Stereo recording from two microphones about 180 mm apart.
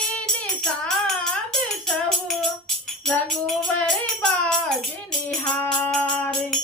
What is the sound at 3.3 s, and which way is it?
Music, centre (ahead or behind).